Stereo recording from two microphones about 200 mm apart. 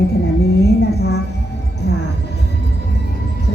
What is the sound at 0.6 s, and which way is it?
Music, 55° left (ahead or behind).